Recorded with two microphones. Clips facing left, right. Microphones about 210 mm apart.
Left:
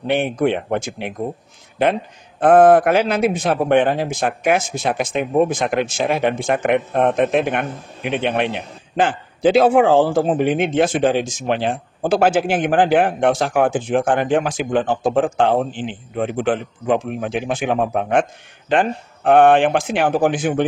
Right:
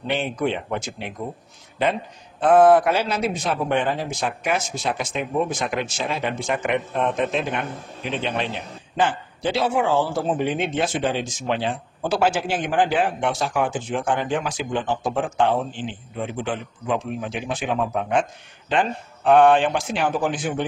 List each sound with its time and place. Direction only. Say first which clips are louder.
0.0 s speech: left 6 dB; 55° left (ahead or behind)
2.4 s speech: left 3 dB; 55° left (ahead or behind)